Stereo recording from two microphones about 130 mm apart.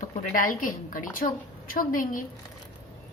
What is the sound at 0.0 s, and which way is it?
A woman's voice, 90° left.